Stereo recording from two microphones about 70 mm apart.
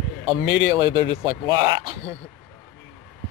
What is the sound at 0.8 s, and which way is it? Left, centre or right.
Speech, right.